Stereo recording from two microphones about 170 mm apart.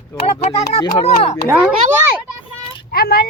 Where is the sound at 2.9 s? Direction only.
60° left (ahead or behind).